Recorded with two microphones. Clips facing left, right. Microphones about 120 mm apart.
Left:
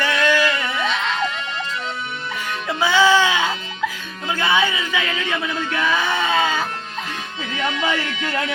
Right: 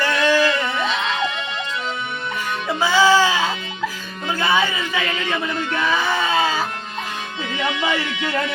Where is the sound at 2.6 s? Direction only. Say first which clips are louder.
Even; 5° right (ahead or behind).